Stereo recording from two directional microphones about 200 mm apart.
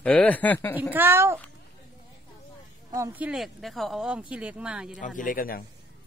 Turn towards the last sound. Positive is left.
turn(degrees=45)  # may be behind; listen again after turning